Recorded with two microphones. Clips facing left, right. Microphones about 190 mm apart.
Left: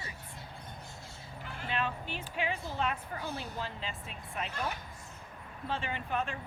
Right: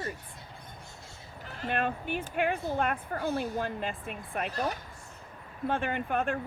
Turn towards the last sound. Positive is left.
turn(degrees=-55)  # may be behind; listen again after turning